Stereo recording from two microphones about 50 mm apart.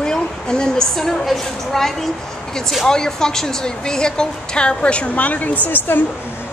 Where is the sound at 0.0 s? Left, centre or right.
Centre; by 6.0 s left.